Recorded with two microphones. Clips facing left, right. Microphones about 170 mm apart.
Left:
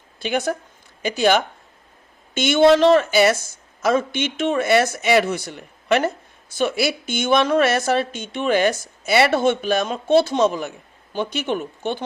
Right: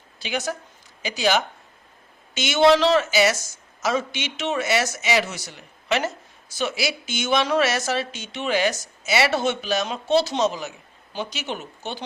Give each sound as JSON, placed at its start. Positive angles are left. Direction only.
{"t": 0.2, "sound": "speech", "side_deg": 55}